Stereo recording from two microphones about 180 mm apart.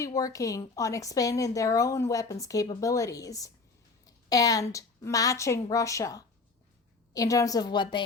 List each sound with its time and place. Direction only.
0.0 s a woman's voice: 20° left (ahead or behind)